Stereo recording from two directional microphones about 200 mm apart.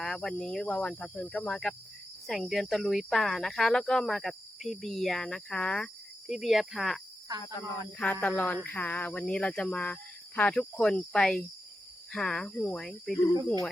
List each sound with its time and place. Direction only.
0.0 s speech: 5° left (ahead or behind)
7.3 s speech: 20° right (ahead or behind)
7.9 s speech: 5° left (ahead or behind)